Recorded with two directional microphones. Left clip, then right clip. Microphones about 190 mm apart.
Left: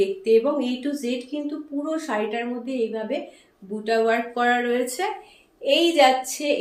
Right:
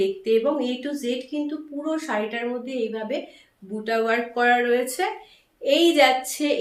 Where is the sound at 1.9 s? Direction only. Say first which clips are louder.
Even; 15° right (ahead or behind).